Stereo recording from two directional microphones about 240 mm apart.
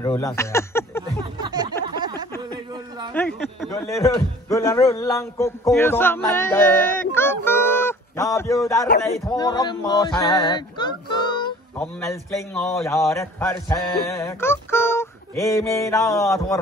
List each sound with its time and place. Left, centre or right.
0.0 s speech: centre
1.4 s music: centre
1.9 s a sound: centre
3.1 s a man's voice: centre
7.2 s honk: centre
9.4 s a sound: centre
11.8 s a man's voice: centre